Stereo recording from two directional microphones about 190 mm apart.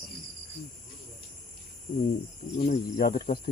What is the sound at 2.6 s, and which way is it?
Speech, 45° left (ahead or behind).